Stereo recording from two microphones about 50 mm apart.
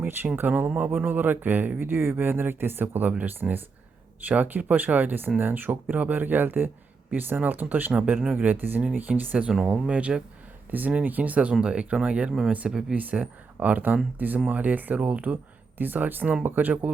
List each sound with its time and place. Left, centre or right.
0.0 s speech: right
0.7 s speech: right
8.2 s speech: right
8.5 s speech: right
9.6 s speech: right
10.7 s speech: right
15.8 s speech: right